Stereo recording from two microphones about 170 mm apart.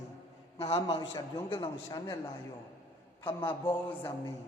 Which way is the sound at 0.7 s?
25° left (ahead or behind).